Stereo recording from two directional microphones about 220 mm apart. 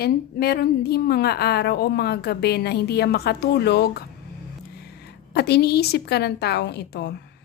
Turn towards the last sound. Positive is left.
turn(degrees=50)  # may be behind; listen again after turning